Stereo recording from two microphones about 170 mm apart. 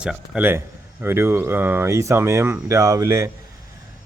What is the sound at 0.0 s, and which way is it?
Speech, 5° right (ahead or behind).